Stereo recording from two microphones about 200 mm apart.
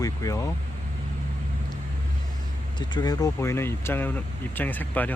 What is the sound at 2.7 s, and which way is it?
Speech, 20° left (ahead or behind).